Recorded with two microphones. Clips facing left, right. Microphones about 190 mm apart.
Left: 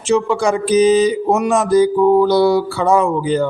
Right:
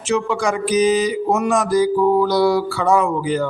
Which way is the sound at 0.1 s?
25° left (ahead or behind).